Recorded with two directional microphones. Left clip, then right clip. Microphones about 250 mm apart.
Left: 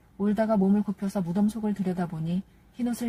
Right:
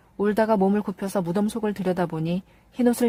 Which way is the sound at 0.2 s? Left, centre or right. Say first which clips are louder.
Right 5 dB; right.